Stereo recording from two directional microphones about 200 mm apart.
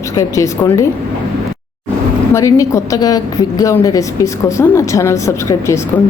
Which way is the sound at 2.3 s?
15° left (ahead or behind).